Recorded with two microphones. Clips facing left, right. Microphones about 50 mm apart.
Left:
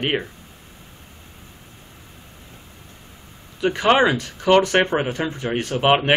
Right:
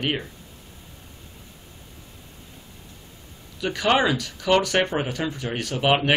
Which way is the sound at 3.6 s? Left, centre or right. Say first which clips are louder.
Left 4 dB; left.